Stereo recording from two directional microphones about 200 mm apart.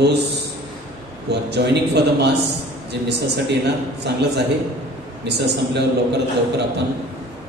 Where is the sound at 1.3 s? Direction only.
55° right (ahead or behind).